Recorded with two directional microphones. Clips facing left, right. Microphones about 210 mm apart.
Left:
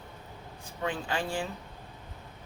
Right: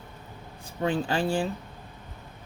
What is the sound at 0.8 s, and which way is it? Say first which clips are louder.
Speech: right 6 dB; 35° right (ahead or behind).